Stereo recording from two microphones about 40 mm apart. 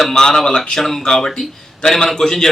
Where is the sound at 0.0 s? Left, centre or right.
Centre.